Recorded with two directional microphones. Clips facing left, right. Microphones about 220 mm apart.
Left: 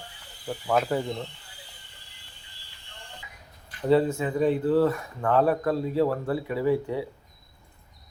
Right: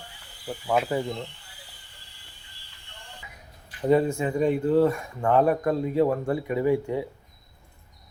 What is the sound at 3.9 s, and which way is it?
A man's voice, 15° right (ahead or behind).